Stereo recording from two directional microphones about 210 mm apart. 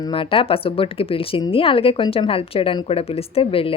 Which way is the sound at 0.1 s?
25° left (ahead or behind).